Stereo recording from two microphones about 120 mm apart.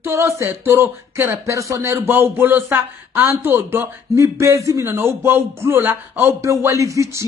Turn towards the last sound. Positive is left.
turn(degrees=-25)  # may be behind; listen again after turning